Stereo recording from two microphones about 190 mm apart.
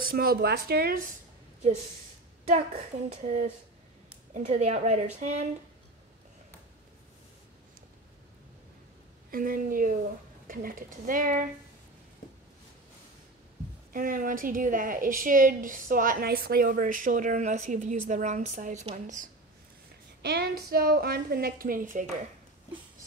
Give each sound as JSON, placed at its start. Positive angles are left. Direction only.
{"t": 0.0, "sound": "speech", "side_deg": -50}
{"t": 3.1, "sound": "a woman's voice", "side_deg": -40}
{"t": 9.3, "sound": "speech", "side_deg": -50}
{"t": 13.9, "sound": "speech", "side_deg": -45}
{"t": 20.2, "sound": "speech", "side_deg": -60}